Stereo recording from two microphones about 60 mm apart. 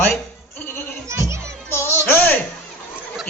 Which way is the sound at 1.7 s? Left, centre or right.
Left.